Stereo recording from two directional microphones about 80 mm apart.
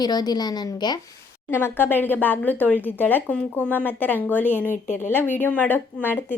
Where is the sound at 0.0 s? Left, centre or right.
Left.